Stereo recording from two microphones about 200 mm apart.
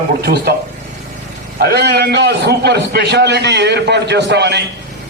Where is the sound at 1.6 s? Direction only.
50° right (ahead or behind).